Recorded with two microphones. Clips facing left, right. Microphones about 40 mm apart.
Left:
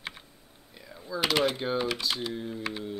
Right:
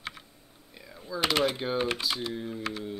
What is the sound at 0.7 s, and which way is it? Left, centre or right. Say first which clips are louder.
Speech: left 1 dB; centre.